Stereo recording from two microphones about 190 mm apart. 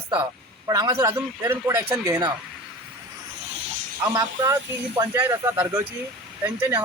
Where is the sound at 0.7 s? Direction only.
20° right (ahead or behind).